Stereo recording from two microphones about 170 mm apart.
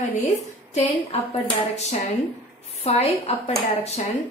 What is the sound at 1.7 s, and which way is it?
A woman's voice, 40° left (ahead or behind).